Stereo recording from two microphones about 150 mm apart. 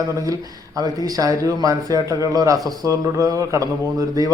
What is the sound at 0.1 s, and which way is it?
Speech, 20° right (ahead or behind).